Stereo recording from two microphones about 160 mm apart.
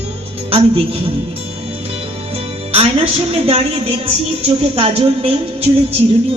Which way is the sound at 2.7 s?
40° right (ahead or behind).